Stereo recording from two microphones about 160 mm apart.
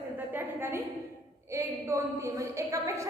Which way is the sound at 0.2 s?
10° right (ahead or behind).